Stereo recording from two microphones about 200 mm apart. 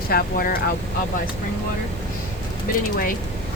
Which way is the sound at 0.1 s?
50° left (ahead or behind).